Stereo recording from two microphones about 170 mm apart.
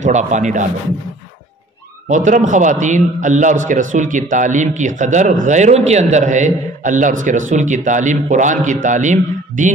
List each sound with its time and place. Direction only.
0.0 s a man's voice: 45° right (ahead or behind)
2.0 s a man's voice: 45° right (ahead or behind)